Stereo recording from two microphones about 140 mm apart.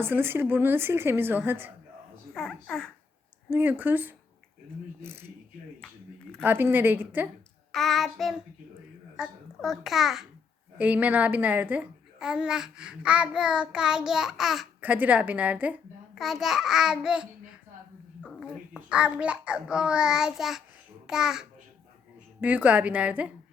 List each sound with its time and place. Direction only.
0.0 s a child's voice: 15° right (ahead or behind)
2.3 s child singing: 5° left (ahead or behind)
3.5 s a child's voice: 15° right (ahead or behind)
6.4 s a child's voice: 15° right (ahead or behind)
7.7 s child singing: centre (ahead or behind)
9.1 s a child's voice: 5° right (ahead or behind)
14.8 s a child's voice: 10° right (ahead or behind)
18.3 s a child's voice: 5° right (ahead or behind)
21.1 s child singing: 5° right (ahead or behind)
22.4 s a child's voice: 10° right (ahead or behind)